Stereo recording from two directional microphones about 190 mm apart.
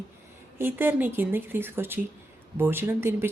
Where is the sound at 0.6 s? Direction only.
10° right (ahead or behind).